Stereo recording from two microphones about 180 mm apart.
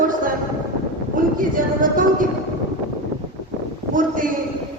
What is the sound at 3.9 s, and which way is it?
Speech, 50° right (ahead or behind).